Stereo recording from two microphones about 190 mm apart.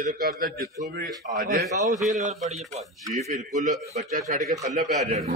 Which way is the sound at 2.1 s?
40° right (ahead or behind).